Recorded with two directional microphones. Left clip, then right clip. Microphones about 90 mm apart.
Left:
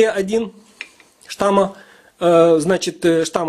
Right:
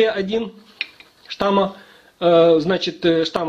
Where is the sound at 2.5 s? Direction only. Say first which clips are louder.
Left 1 dB; 65° left (ahead or behind).